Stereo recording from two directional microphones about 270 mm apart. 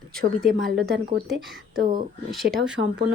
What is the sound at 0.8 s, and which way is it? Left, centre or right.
Speech, right.